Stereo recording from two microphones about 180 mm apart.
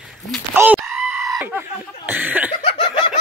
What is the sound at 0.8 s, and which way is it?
Goat, centre (ahead or behind).